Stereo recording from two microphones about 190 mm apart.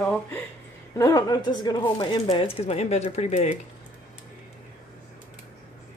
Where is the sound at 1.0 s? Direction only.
20° left (ahead or behind); by 3.5 s 35° left (ahead or behind).